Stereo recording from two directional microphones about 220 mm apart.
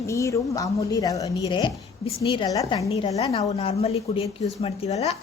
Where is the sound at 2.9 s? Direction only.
30° left (ahead or behind).